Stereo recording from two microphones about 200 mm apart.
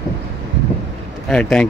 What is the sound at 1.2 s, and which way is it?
Speech, 5° left (ahead or behind).